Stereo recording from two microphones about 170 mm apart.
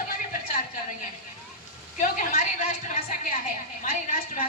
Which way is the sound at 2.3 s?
45° left (ahead or behind).